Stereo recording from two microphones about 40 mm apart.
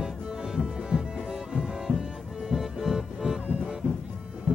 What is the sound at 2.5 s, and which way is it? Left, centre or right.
Music, centre.